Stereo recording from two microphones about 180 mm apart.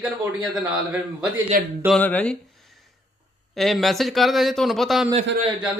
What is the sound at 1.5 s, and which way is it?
Speech, 50° right (ahead or behind).